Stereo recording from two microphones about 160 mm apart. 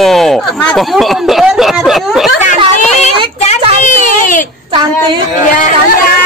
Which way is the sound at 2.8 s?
45° left (ahead or behind).